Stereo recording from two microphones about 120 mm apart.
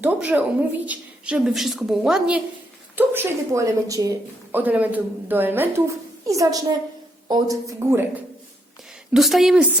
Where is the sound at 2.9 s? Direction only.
15° right (ahead or behind).